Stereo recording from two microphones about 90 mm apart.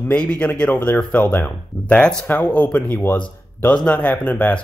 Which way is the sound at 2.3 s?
20° left (ahead or behind).